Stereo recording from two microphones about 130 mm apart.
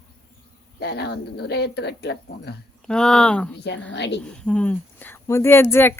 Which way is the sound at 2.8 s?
5° left (ahead or behind).